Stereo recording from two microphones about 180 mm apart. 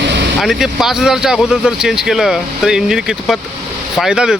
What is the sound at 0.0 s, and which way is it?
Vehicle, 70° right (ahead or behind).